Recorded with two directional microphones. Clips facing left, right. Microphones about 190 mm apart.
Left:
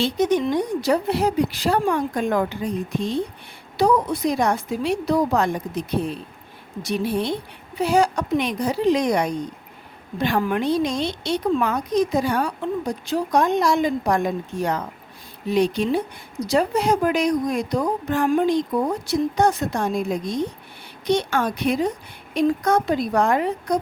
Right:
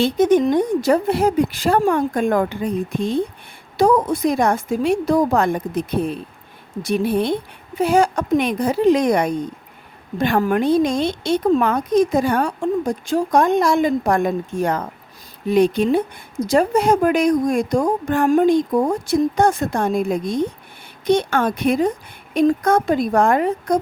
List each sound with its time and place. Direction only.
0.0 s a woman's voice: 50° right (ahead or behind)